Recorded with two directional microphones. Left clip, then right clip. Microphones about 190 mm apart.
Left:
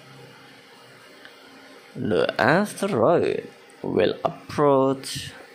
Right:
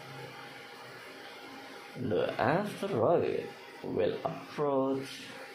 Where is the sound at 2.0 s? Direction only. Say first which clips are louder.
Left 9 dB; 35° left (ahead or behind).